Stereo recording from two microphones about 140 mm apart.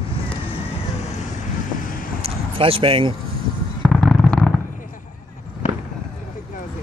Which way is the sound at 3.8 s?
Centre (ahead or behind).